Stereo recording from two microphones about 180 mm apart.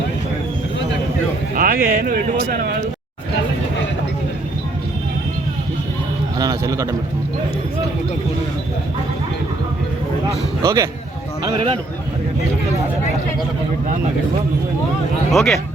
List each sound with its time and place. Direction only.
1.5 s speech: 50° right (ahead or behind)
6.4 s a sound: 20° right (ahead or behind)
10.6 s a man's voice: 20° right (ahead or behind)
15.3 s speech: centre (ahead or behind)